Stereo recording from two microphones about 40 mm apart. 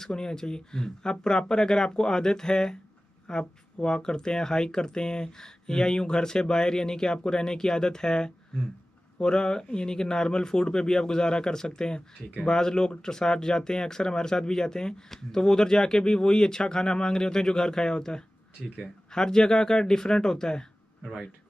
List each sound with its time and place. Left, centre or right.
0.0 s speech: centre
21.0 s speech: centre